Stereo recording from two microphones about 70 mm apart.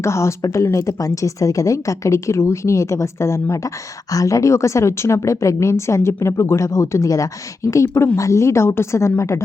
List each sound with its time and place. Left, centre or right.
0.0 s a woman's voice: left